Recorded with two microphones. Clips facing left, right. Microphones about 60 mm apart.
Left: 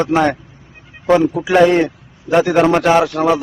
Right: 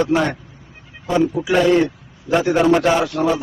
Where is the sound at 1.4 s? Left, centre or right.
Left.